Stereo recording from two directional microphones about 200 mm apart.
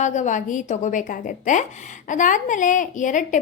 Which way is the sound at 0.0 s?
35° left (ahead or behind).